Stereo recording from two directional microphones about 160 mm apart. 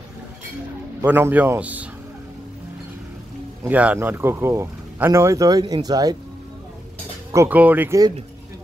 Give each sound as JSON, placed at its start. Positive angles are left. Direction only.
{"t": 1.0, "sound": "speech", "side_deg": -10}
{"t": 3.6, "sound": "speech", "side_deg": -10}
{"t": 7.3, "sound": "speech", "side_deg": -10}